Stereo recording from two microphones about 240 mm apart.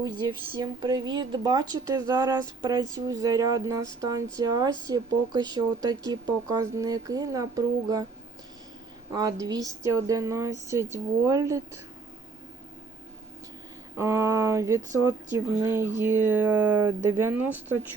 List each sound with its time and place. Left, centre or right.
0.0 s speech: centre
9.1 s speech: centre
13.9 s speech: centre